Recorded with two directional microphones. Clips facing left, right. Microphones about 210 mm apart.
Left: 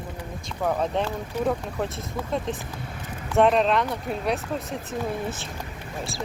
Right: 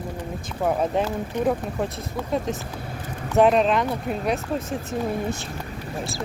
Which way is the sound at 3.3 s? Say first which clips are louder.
Right 2 dB; centre (ahead or behind).